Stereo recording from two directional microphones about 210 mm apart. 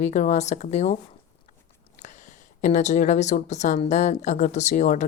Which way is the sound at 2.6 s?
35° left (ahead or behind).